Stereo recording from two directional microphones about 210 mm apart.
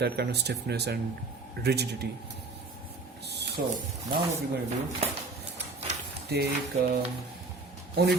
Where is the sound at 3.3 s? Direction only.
50° right (ahead or behind).